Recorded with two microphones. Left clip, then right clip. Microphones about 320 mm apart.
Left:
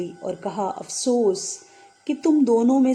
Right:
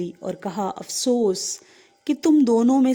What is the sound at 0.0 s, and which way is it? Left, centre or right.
Speech, right.